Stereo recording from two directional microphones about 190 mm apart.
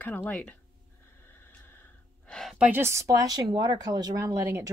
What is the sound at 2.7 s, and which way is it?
Speech, 15° right (ahead or behind).